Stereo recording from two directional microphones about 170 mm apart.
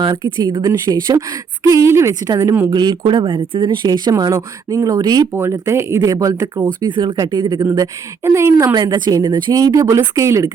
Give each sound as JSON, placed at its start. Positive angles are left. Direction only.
{"t": 0.0, "sound": "speech", "side_deg": -20}